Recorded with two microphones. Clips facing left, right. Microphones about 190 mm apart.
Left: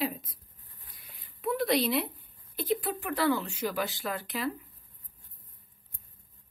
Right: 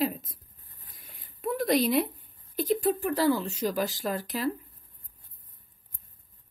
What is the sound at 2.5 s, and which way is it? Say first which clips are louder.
A woman's voice: right 5 dB; 45° right (ahead or behind).